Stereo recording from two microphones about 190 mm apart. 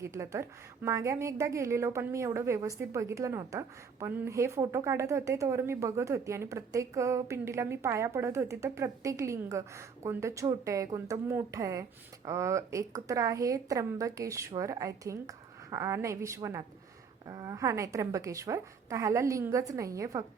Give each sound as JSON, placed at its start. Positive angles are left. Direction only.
{"t": 0.0, "sound": "a woman's voice", "side_deg": -15}